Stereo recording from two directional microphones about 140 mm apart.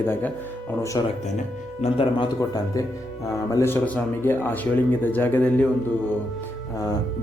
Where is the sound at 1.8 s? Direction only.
40° left (ahead or behind).